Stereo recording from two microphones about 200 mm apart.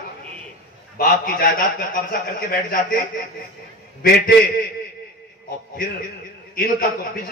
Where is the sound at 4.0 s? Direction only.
50° left (ahead or behind).